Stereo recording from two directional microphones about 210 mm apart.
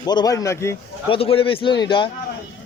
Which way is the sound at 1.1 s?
25° left (ahead or behind).